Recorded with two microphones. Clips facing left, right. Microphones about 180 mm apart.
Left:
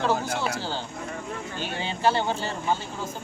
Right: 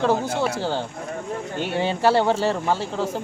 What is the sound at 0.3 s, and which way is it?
Speech, 60° right (ahead or behind).